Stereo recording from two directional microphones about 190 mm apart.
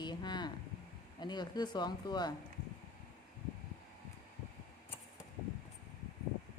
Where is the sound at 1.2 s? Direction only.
20° left (ahead or behind).